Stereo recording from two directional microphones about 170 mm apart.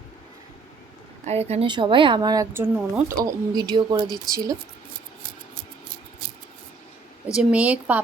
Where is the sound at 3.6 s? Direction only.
25° right (ahead or behind).